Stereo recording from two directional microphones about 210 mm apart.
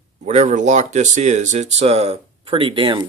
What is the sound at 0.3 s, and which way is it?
Speech, 35° right (ahead or behind).